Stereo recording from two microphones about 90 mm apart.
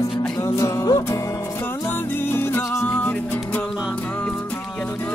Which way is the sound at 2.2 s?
25° left (ahead or behind).